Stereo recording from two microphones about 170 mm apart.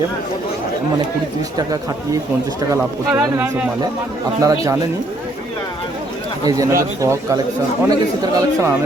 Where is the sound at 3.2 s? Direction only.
10° right (ahead or behind).